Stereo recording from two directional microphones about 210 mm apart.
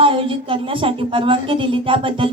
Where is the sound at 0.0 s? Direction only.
25° right (ahead or behind).